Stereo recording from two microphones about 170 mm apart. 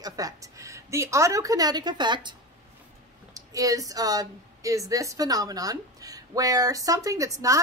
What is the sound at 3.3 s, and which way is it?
Speech, 20° right (ahead or behind).